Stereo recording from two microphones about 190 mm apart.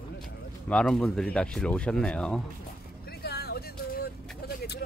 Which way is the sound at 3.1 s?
55° left (ahead or behind).